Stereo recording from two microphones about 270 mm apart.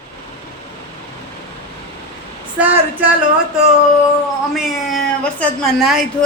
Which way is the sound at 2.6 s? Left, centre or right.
Centre.